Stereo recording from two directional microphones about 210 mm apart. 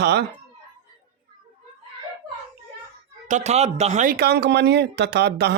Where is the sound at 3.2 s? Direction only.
35° right (ahead or behind); by 5.5 s 55° right (ahead or behind).